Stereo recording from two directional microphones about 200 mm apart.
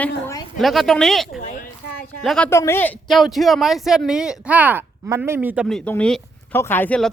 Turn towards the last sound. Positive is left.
turn(degrees=5)  # may be behind; listen again after turning